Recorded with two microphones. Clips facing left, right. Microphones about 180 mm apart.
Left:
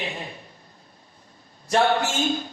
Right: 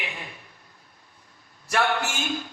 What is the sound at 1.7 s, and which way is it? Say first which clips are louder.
Speech: left 4 dB; 25° left (ahead or behind).